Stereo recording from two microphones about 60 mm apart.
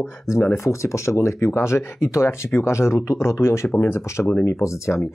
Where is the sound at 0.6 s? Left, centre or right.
Left.